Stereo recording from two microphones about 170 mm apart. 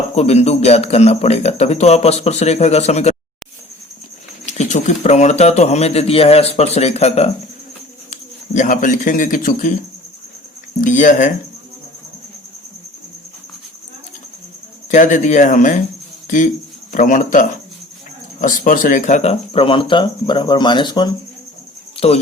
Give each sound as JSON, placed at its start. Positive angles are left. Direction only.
{"t": 0.2, "sound": "a man's voice", "side_deg": 40}
{"t": 4.4, "sound": "a man's voice", "side_deg": 45}
{"t": 10.8, "sound": "speech", "side_deg": 45}
{"t": 14.8, "sound": "a man's voice", "side_deg": 45}
{"t": 21.9, "sound": "speech", "side_deg": 35}